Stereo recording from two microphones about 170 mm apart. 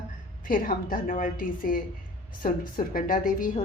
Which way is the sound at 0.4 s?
55° left (ahead or behind).